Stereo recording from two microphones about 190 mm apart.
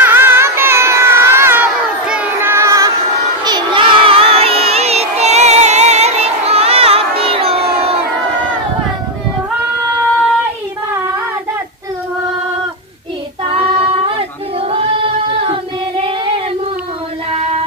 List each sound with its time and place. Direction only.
0.0 s music: 10° right (ahead or behind)
2.0 s child singing: 5° right (ahead or behind)
3.4 s crowd: 25° right (ahead or behind)
13.5 s child singing: 30° right (ahead or behind)
14.6 s singing: 30° right (ahead or behind)